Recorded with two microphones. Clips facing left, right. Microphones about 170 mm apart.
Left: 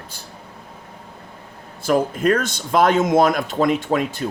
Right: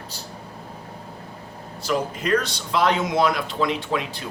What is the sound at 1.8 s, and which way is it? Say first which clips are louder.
Speech: left 6 dB; 50° left (ahead or behind).